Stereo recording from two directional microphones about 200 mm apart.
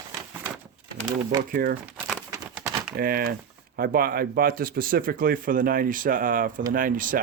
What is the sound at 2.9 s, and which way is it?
Speech, 45° right (ahead or behind).